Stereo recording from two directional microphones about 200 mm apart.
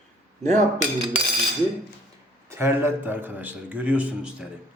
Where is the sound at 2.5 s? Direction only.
10° right (ahead or behind).